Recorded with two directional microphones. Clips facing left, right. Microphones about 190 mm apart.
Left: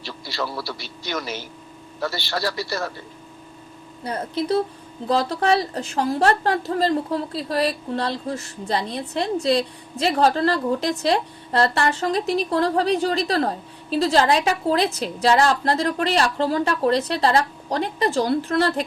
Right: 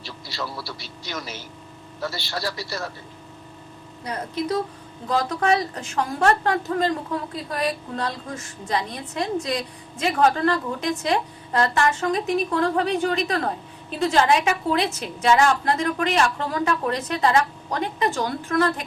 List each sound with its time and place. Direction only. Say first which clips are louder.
0.3 s speech: left 4 dB; 70° left (ahead or behind)
4.0 s a woman's voice: left 2 dB; 30° left (ahead or behind)